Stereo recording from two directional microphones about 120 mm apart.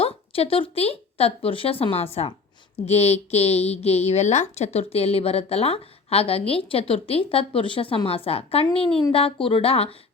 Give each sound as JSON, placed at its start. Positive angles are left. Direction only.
{"t": 0.0, "sound": "a woman's voice", "side_deg": 50}